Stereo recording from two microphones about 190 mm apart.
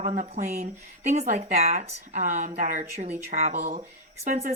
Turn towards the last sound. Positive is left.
turn(degrees=-40)  # may be behind; listen again after turning